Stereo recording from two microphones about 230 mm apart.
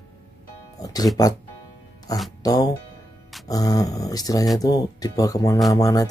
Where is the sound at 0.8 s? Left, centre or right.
Centre.